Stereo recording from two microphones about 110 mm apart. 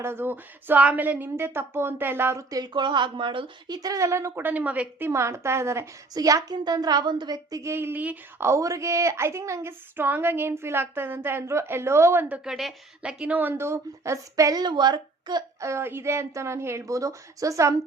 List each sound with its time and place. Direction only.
0.0 s a woman's voice: 20° right (ahead or behind)
2.5 s speech: 40° right (ahead or behind)
3.8 s a woman's voice: 30° right (ahead or behind)
12.3 s a woman's voice: centre (ahead or behind); by 15.4 s 40° right (ahead or behind)
15.6 s a woman's voice: 25° right (ahead or behind)